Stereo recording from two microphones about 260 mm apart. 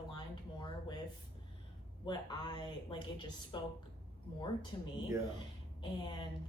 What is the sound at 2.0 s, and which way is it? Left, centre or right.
Speech, centre.